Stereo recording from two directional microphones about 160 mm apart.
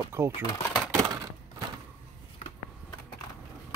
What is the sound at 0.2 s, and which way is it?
Speech, 15° right (ahead or behind).